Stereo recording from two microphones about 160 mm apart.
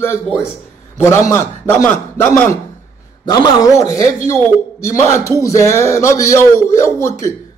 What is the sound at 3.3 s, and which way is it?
A man's voice, 25° left (ahead or behind).